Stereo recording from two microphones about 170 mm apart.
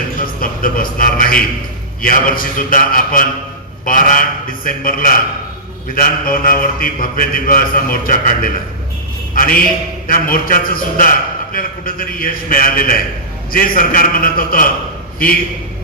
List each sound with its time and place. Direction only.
0.2 s a man's voice: 55° left (ahead or behind)
2.0 s mantra: 55° left (ahead or behind)